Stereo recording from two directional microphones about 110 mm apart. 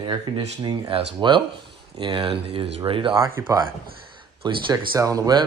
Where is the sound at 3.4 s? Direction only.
30° right (ahead or behind).